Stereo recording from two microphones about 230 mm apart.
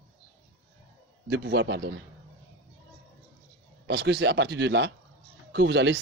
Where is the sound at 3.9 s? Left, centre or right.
Right.